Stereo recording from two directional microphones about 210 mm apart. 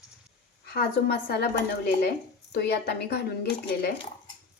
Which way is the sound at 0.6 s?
45° left (ahead or behind).